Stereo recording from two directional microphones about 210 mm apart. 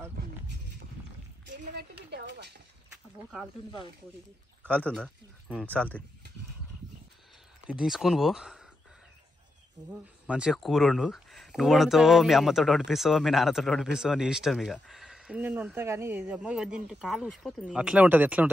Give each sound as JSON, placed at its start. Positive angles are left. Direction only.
{"t": 1.7, "sound": "a sound", "side_deg": -50}
{"t": 4.8, "sound": "speech", "side_deg": 5}
{"t": 7.6, "sound": "speech", "side_deg": -5}
{"t": 10.2, "sound": "speech", "side_deg": -5}